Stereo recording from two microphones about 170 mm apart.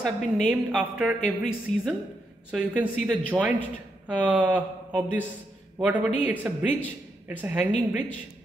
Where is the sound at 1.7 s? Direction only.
45° left (ahead or behind).